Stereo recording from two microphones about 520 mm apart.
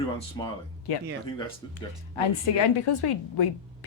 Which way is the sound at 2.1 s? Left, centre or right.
Left.